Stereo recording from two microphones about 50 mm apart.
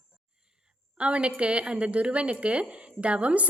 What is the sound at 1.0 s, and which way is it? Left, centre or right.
A woman's voice, right.